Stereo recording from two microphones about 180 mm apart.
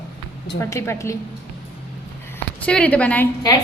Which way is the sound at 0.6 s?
15° left (ahead or behind).